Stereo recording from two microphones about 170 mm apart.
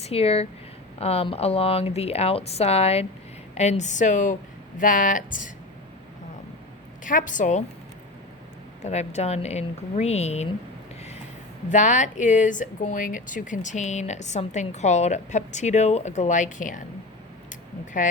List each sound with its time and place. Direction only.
0.0 s speech: 35° left (ahead or behind)
7.0 s speech: 50° left (ahead or behind)
8.8 s speech: 40° left (ahead or behind)
11.7 s speech: 45° left (ahead or behind)